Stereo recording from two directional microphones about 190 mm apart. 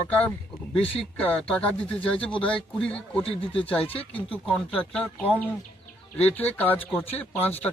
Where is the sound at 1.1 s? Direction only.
5° left (ahead or behind).